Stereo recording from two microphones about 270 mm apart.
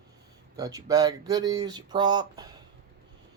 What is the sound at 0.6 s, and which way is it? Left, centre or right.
Speech, centre.